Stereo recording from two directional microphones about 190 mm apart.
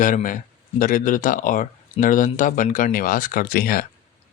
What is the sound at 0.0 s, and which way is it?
Speech, 45° left (ahead or behind).